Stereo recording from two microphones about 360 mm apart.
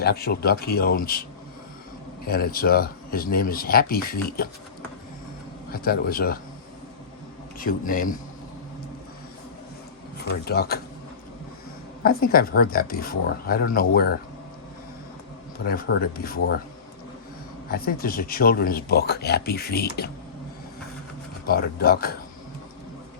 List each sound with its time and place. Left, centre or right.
0.0 s speech: left
2.2 s speech: left
5.7 s speech: left
7.6 s speech: left
10.2 s speech: left
12.0 s speech: left
15.6 s speech: left
17.7 s speech: left
21.4 s speech: left